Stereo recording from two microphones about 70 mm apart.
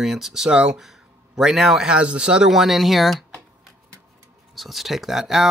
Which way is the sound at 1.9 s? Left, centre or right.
Centre.